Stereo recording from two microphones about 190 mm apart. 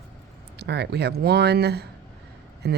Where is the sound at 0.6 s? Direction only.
60° right (ahead or behind).